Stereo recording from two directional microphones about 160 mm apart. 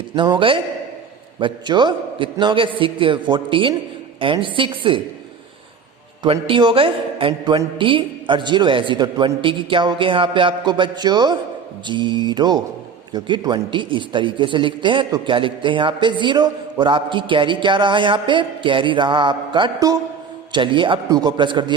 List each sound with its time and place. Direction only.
0.2 s a man's voice: 30° right (ahead or behind)
6.2 s a man's voice: 35° right (ahead or behind)